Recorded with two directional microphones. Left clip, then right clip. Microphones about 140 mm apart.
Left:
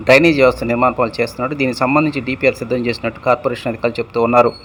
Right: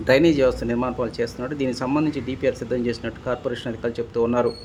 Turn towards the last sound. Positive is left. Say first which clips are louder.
# left 6 dB
turn(degrees=30)  # may be behind; listen again after turning